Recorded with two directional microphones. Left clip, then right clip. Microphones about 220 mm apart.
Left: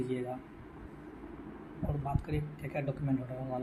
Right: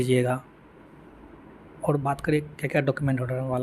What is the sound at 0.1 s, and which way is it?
Speech, 45° right (ahead or behind).